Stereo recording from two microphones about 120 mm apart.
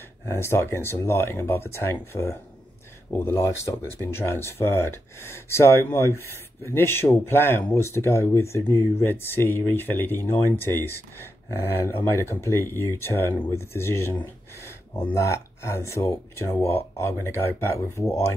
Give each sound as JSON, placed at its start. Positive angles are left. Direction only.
{"t": 0.3, "sound": "speech", "side_deg": 20}